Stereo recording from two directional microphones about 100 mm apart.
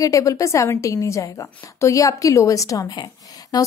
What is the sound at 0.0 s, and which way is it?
A woman's voice, 35° left (ahead or behind).